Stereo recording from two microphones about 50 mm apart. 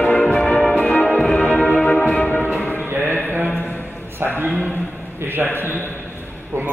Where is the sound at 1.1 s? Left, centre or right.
Centre.